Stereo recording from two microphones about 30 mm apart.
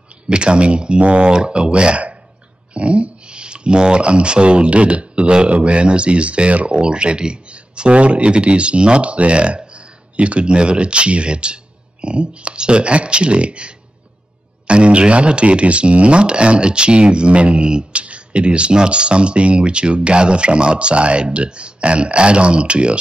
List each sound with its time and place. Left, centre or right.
0.3 s speech: right
6.8 s speech: right